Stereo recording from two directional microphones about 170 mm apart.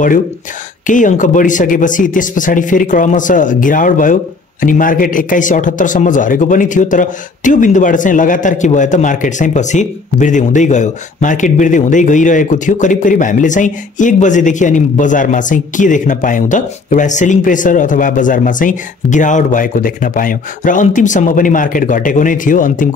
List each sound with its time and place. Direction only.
0.8 s speech: 50° left (ahead or behind)